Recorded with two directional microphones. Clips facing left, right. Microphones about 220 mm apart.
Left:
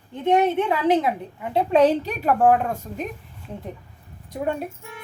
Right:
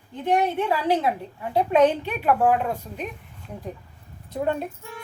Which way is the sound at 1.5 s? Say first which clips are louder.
Left 1 dB; 30° left (ahead or behind).